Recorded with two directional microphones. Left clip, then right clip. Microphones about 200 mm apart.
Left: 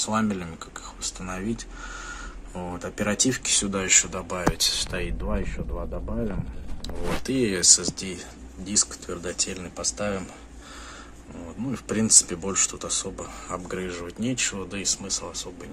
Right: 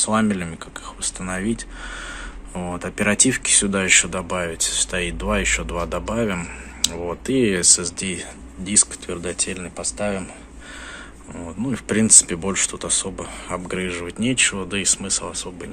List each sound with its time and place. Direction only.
0.0 s speech: centre (ahead or behind)
6.8 s speech: centre (ahead or behind)
11.7 s speech: centre (ahead or behind)